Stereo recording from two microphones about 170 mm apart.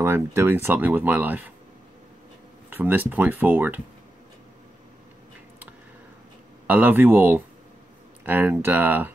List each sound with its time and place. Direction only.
0.0 s speech: 15° right (ahead or behind)
2.7 s speech: 10° right (ahead or behind)
6.7 s speech: 10° right (ahead or behind)